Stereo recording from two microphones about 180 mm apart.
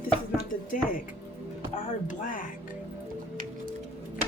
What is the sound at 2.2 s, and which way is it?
Speech, 50° left (ahead or behind).